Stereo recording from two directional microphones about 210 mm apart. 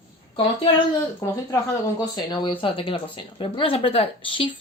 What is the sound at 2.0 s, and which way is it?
Speech, 20° left (ahead or behind).